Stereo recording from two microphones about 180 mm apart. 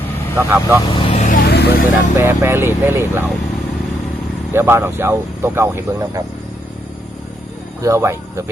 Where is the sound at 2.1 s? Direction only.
15° right (ahead or behind).